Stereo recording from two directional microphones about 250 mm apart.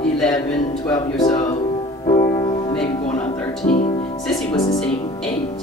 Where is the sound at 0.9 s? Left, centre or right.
Centre.